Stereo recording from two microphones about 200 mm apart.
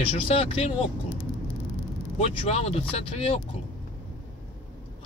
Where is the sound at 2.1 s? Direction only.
30° left (ahead or behind).